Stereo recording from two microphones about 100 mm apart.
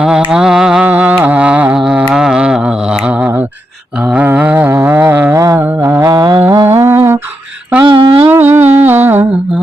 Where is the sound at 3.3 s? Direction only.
20° right (ahead or behind).